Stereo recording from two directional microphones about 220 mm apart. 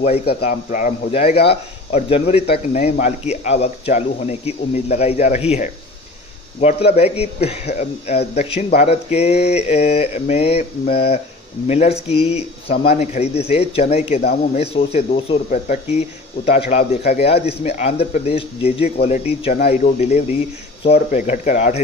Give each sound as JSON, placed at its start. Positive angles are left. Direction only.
{"t": 0.4, "sound": "a man's voice", "side_deg": 35}
{"t": 2.0, "sound": "speech", "side_deg": 30}
{"t": 6.9, "sound": "speech", "side_deg": 30}
{"t": 14.2, "sound": "a man's voice", "side_deg": 40}
{"t": 14.6, "sound": "a man's voice", "side_deg": 30}